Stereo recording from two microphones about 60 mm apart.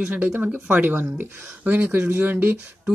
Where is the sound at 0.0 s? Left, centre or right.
Right.